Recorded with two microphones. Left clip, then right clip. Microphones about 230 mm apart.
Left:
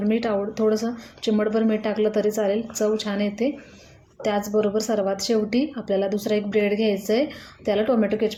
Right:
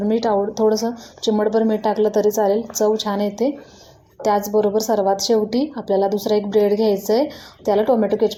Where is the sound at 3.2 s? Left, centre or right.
Centre.